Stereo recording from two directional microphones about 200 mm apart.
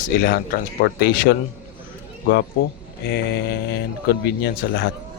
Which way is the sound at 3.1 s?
55° left (ahead or behind).